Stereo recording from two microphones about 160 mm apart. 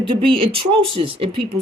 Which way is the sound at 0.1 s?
35° right (ahead or behind).